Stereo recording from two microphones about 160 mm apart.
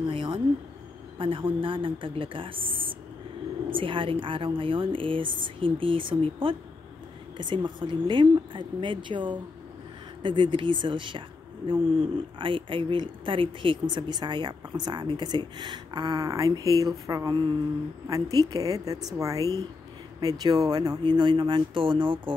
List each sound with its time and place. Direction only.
0.0 s a woman's voice: 35° right (ahead or behind)